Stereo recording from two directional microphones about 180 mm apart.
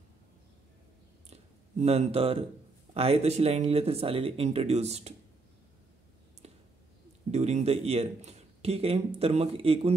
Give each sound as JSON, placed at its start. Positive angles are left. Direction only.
{"t": 1.3, "sound": "a sound", "side_deg": -35}
{"t": 2.9, "sound": "a man's voice", "side_deg": -35}
{"t": 7.2, "sound": "a man's voice", "side_deg": -40}